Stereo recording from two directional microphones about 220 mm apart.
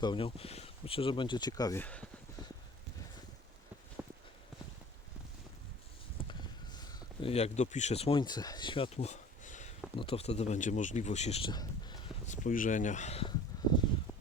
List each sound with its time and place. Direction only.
0.0 s speech: 25° left (ahead or behind); by 2.0 s 5° left (ahead or behind)
4.0 s walk: 5° right (ahead or behind)
6.7 s speech: 20° left (ahead or behind)
12.3 s speech: 35° left (ahead or behind)
13.5 s a sound: 15° left (ahead or behind)